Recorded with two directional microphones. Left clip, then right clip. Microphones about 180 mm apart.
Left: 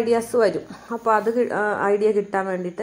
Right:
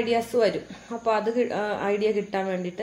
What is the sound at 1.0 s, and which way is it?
Speech, 15° left (ahead or behind).